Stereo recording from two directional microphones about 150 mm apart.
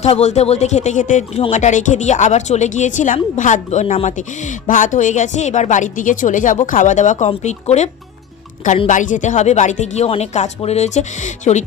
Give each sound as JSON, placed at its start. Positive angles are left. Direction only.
{"t": 0.0, "sound": "a woman's voice", "side_deg": 50}
{"t": 8.9, "sound": "speech", "side_deg": 60}